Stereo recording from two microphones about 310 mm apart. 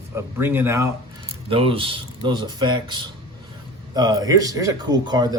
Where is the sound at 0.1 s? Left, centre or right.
Centre.